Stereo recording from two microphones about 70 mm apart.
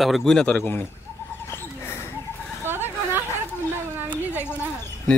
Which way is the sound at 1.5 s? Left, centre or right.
Left.